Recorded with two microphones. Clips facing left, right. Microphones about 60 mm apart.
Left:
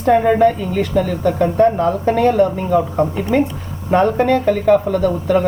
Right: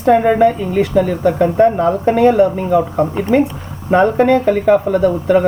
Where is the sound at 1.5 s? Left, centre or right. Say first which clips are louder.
Right 2 dB; right.